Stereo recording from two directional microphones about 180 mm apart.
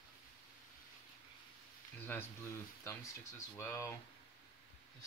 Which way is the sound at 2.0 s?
10° left (ahead or behind).